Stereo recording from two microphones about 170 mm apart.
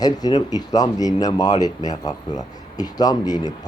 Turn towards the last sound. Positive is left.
turn(degrees=25)  # may be behind; listen again after turning